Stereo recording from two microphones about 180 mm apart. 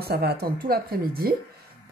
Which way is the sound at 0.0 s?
60° right (ahead or behind).